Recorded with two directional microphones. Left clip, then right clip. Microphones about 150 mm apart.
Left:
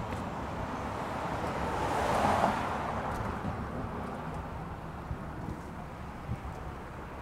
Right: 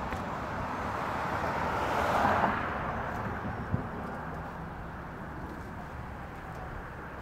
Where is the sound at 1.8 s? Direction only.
25° left (ahead or behind); by 2.6 s 45° left (ahead or behind).